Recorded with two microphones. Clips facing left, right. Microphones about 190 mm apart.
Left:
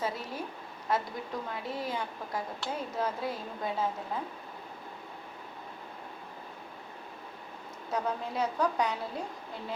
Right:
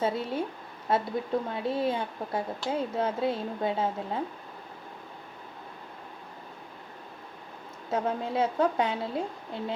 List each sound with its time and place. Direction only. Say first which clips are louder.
0.0 s speech: right 6 dB; 25° right (ahead or behind)
7.9 s speech: right 4 dB; 25° right (ahead or behind)